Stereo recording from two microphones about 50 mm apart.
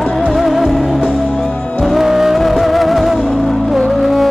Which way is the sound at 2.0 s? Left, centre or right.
Centre.